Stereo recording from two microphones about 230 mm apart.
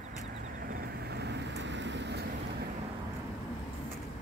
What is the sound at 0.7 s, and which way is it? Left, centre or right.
Vehicle, right.